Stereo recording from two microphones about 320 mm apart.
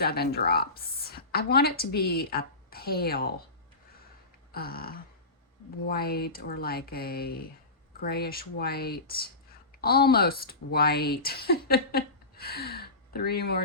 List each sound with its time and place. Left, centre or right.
0.0 s a woman's voice: left
4.5 s speech: left